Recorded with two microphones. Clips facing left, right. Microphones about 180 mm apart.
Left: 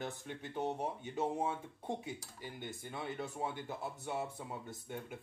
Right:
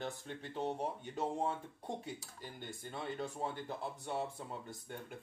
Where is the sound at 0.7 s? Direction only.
5° left (ahead or behind).